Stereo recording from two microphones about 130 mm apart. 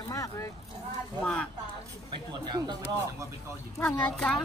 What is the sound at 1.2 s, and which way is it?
Speech, 10° left (ahead or behind).